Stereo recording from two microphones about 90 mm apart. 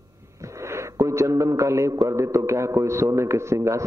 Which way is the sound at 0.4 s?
35° right (ahead or behind).